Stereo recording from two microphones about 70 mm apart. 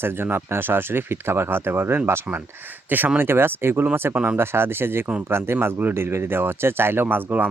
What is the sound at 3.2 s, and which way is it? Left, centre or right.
Speech, right.